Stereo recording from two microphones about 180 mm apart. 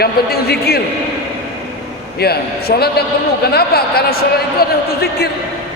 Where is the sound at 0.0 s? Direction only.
60° left (ahead or behind).